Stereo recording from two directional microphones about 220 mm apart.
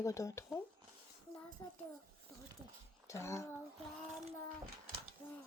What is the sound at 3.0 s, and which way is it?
Speech, 15° left (ahead or behind).